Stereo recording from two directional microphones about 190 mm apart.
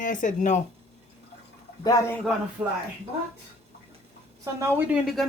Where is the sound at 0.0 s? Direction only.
45° left (ahead or behind).